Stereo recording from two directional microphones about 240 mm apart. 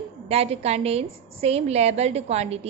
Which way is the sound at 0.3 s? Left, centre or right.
Right.